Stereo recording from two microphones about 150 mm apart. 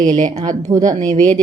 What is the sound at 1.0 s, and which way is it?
Speech, 55° right (ahead or behind).